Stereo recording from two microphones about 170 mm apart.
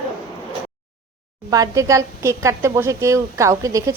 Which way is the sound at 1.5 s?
20° right (ahead or behind).